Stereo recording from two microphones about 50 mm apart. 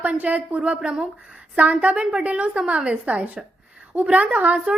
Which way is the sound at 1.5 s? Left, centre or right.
Right.